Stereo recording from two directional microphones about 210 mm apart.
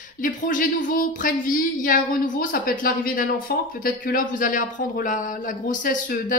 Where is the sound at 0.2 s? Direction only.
40° left (ahead or behind).